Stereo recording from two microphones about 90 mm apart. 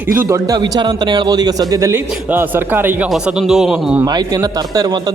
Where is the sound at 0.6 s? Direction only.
55° right (ahead or behind); by 2.0 s 35° right (ahead or behind).